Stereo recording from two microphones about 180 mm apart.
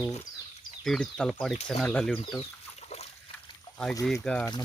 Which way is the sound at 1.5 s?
35° left (ahead or behind).